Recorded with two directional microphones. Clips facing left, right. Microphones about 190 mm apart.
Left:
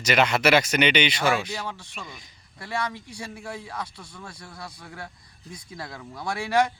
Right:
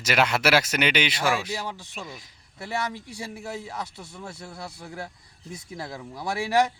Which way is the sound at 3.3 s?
25° right (ahead or behind).